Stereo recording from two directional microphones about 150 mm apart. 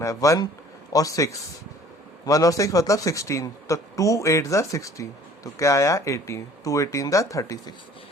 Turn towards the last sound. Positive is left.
turn(degrees=20)  # may be behind; listen again after turning